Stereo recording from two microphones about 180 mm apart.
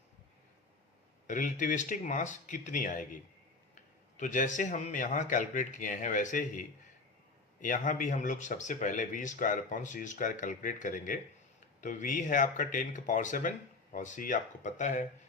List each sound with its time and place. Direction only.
1.3 s speech: 45° left (ahead or behind)